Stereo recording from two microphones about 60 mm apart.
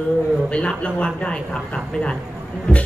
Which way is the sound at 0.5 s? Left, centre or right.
Centre.